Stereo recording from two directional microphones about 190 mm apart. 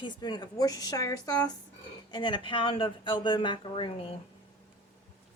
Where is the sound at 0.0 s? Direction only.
25° left (ahead or behind).